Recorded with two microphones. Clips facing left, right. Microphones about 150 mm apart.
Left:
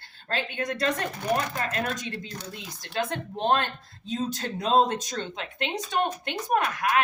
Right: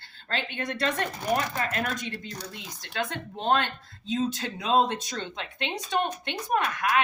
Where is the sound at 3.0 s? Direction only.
45° left (ahead or behind).